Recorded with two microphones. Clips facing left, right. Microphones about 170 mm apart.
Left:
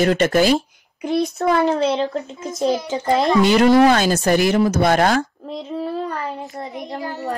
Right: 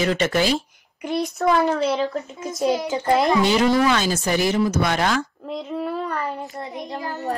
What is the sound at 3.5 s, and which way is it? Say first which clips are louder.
Speech: left 5 dB; 65° left (ahead or behind).